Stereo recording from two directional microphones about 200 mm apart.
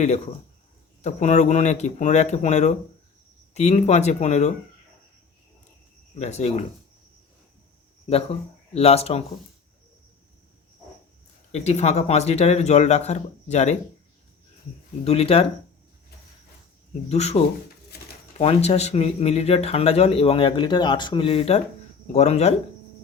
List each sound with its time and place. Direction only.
1.0 s speech: 35° left (ahead or behind)
6.1 s speech: 35° left (ahead or behind)
8.1 s speech: 30° left (ahead or behind)
11.5 s speech: 35° left (ahead or behind)
15.0 s speech: 30° left (ahead or behind)
17.1 s speech: 30° left (ahead or behind)